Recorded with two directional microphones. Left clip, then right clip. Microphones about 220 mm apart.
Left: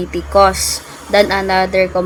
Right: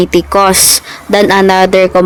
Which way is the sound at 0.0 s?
40° right (ahead or behind).